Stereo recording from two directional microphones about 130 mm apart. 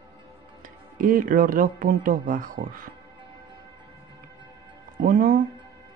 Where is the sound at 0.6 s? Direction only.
90° right.